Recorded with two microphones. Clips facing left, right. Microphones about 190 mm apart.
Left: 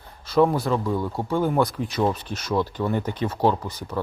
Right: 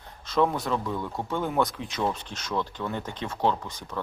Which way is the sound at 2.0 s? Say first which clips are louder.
Left 5 dB; 10° left (ahead or behind).